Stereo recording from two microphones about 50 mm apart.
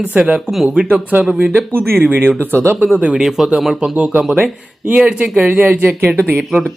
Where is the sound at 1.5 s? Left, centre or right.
Right.